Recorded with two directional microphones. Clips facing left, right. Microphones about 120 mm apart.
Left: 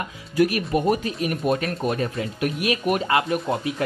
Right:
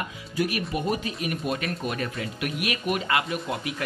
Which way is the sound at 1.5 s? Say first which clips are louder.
Left 6 dB; 35° left (ahead or behind).